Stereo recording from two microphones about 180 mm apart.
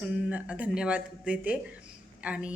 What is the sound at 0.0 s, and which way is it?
A woman's voice, 10° right (ahead or behind).